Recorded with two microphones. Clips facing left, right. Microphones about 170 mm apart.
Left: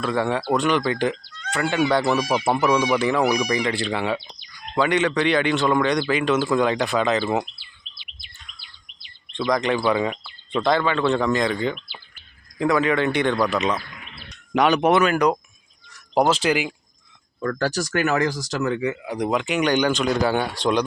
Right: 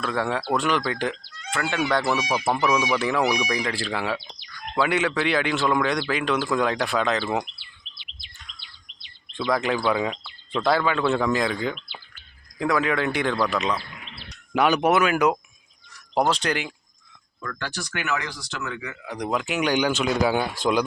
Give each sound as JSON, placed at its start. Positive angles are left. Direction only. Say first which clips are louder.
{"t": 0.0, "sound": "a man's voice", "louder": "left 3 dB", "side_deg": 0}
{"t": 7.9, "sound": "bird", "louder": "left 1 dB", "side_deg": -65}
{"t": 8.5, "sound": "bird vocalization", "louder": "right 1 dB", "side_deg": 10}
{"t": 9.3, "sound": "a man's voice", "louder": "left 2 dB", "side_deg": -5}
{"t": 17.4, "sound": "speech", "louder": "left 10 dB", "side_deg": 40}
{"t": 19.0, "sound": "a man's voice", "louder": "left 4 dB", "side_deg": 5}